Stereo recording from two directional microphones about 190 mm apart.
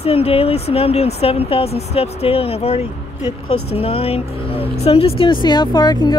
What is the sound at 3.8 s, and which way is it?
Speech, 30° left (ahead or behind).